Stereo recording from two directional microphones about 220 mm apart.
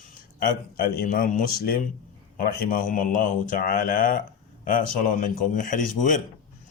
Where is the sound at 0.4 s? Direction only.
40° left (ahead or behind).